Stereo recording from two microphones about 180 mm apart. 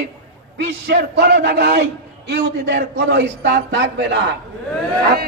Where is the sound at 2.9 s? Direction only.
75° right (ahead or behind).